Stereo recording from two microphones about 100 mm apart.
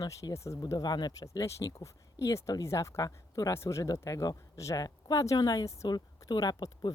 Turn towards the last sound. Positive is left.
turn(degrees=40)  # may be behind; listen again after turning